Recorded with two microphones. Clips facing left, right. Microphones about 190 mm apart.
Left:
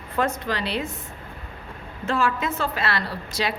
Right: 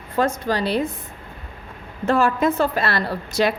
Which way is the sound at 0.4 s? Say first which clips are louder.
Right 6 dB; 40° right (ahead or behind).